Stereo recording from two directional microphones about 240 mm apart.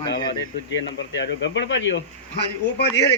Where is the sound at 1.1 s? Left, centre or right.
Left.